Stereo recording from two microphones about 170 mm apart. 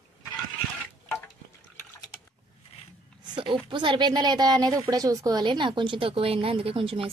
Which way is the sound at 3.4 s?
30° right (ahead or behind).